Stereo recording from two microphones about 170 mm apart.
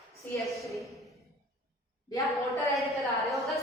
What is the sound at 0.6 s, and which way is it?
Speech, centre (ahead or behind).